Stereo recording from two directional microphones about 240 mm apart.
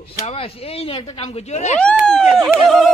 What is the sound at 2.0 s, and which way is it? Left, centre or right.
Speech, centre.